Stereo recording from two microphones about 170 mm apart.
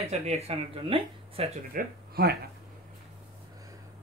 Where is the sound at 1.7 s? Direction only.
65° right (ahead or behind).